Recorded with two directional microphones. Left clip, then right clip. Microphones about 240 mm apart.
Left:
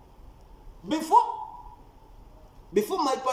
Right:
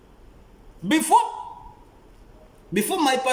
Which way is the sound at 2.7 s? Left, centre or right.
Centre.